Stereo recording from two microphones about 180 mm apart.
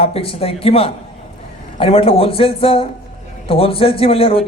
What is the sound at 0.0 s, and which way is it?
A man's voice, 30° left (ahead or behind).